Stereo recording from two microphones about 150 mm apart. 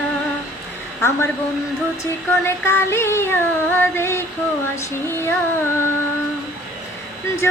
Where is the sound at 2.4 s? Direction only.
15° left (ahead or behind).